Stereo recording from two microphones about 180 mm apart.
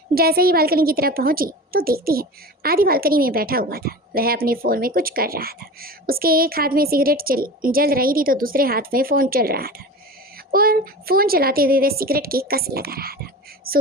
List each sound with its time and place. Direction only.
0.1 s a woman's voice: 55° right (ahead or behind)